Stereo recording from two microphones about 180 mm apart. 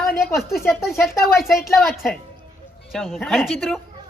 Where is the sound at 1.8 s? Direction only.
Centre (ahead or behind).